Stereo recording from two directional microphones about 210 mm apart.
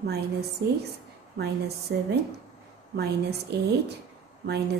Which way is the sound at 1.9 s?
55° right (ahead or behind).